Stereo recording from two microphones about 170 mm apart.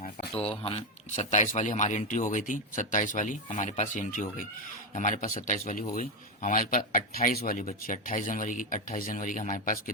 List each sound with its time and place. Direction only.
0.0 s a man's voice: 35° left (ahead or behind); by 9.9 s 50° left (ahead or behind)